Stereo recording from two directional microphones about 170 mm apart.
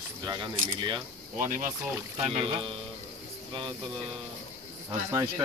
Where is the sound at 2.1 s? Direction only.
35° right (ahead or behind).